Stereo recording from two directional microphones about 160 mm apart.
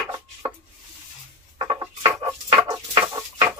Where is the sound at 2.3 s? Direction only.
25° right (ahead or behind).